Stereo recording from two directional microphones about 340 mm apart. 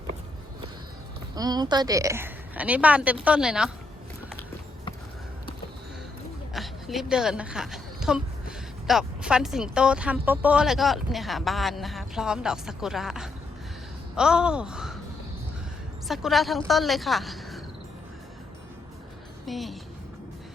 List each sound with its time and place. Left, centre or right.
1.4 s a woman's voice: centre
6.5 s a woman's voice: centre
16.0 s a woman's voice: centre
19.5 s a woman's voice: centre